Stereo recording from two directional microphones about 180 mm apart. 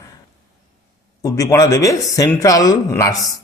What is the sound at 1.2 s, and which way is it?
A man's voice, 20° left (ahead or behind).